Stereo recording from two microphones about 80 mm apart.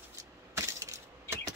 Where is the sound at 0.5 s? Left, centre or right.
Right.